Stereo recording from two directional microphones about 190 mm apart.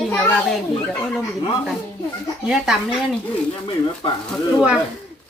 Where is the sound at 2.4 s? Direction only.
5° right (ahead or behind).